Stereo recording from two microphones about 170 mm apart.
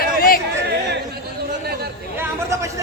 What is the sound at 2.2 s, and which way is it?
Speech, 15° right (ahead or behind).